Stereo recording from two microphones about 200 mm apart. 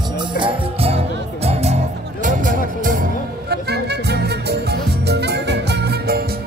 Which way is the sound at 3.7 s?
55° right (ahead or behind).